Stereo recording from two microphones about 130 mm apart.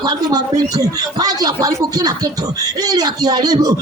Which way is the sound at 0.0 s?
30° right (ahead or behind).